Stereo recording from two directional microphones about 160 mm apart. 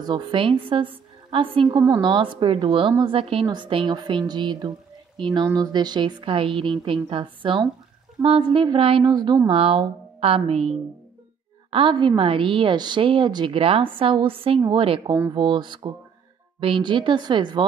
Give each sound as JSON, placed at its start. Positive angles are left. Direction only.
{"t": 0.0, "sound": "a woman's voice", "side_deg": -30}
{"t": 11.7, "sound": "a woman's voice", "side_deg": -30}